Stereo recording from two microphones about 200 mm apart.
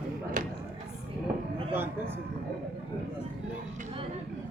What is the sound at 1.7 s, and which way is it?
Speech, 10° right (ahead or behind).